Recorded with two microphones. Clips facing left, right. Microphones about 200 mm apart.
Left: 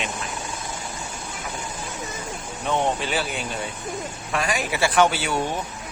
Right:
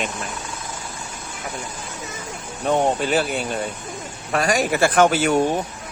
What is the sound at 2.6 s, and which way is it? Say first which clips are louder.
Speech: right 4 dB; 45° right (ahead or behind).